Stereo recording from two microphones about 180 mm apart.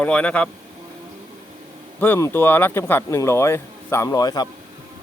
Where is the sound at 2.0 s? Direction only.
10° left (ahead or behind).